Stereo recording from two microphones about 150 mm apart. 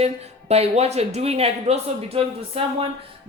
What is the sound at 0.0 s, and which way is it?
Speech, 45° right (ahead or behind).